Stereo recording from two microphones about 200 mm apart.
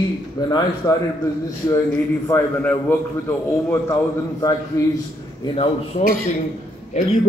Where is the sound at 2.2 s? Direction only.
10° left (ahead or behind).